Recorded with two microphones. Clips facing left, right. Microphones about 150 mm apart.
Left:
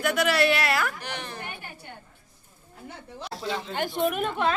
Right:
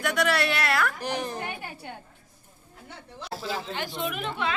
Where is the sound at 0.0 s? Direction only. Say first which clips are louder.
Left 2 dB; centre (ahead or behind).